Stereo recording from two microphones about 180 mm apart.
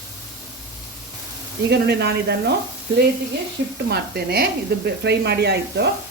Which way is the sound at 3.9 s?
60° right (ahead or behind).